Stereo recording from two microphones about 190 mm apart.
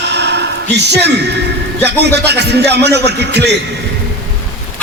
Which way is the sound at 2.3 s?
60° right (ahead or behind).